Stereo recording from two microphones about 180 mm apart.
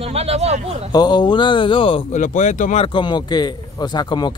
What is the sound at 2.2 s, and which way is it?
Speech, 45° left (ahead or behind).